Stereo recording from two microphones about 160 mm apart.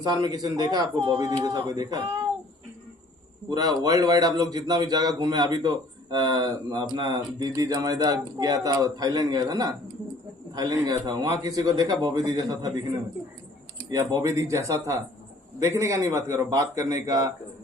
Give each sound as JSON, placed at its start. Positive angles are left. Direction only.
{"t": 0.0, "sound": "a man's voice", "side_deg": -25}
{"t": 3.5, "sound": "a man's voice", "side_deg": -25}
{"t": 13.7, "sound": "a man's voice", "side_deg": -25}